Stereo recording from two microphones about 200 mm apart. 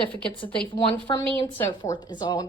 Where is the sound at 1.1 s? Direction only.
25° left (ahead or behind).